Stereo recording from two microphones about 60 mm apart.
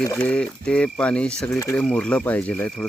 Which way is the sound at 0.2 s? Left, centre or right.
Left.